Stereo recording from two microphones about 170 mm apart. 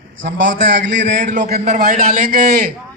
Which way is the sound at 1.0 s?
50° right (ahead or behind).